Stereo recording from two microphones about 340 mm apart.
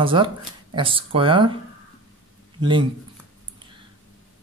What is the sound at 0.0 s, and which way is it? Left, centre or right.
Speech, centre.